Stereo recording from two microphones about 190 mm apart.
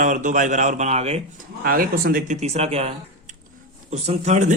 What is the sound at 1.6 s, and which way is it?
Speech, 50° right (ahead or behind).